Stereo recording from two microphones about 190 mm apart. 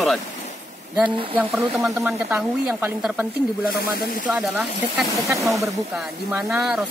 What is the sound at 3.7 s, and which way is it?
Speech, 55° left (ahead or behind).